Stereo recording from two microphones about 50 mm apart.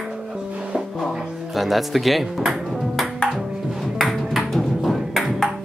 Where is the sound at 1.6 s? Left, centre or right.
Centre.